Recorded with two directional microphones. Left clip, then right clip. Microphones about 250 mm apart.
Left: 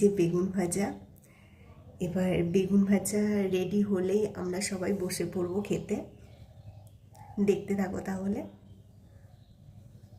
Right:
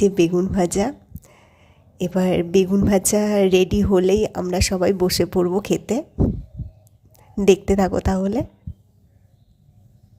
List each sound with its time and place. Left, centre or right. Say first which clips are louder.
0.0 s a woman's voice: right 9 dB; right
2.1 s a woman's voice: right 11 dB; right
7.3 s a woman's voice: right 13 dB; right